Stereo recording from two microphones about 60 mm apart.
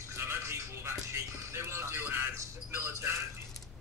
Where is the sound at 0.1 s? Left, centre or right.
Right.